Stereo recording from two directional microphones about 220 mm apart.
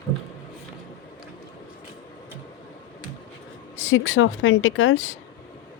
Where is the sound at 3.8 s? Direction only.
65° left (ahead or behind).